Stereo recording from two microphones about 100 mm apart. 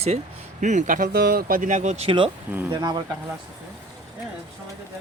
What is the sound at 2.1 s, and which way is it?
Speech, 60° right (ahead or behind).